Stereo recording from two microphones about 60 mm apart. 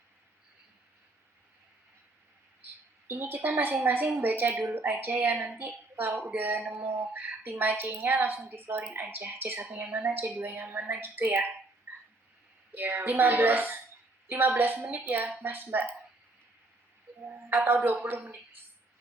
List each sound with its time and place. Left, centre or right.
3.1 s speech: right
11.9 s a sound: right
12.7 s speech: right
17.2 s a man's voice: right